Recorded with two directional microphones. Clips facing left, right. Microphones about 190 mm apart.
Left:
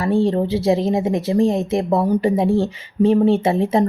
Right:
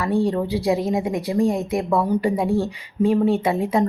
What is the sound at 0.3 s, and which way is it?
Speech, 30° left (ahead or behind).